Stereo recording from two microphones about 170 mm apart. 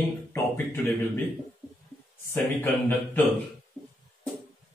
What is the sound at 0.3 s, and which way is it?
Speech, 10° left (ahead or behind).